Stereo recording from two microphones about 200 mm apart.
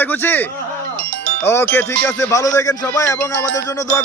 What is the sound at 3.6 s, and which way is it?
Speech, 15° left (ahead or behind).